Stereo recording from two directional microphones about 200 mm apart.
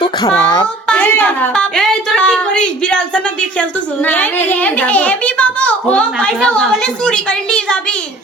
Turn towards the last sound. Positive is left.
turn(degrees=5)  # may be behind; listen again after turning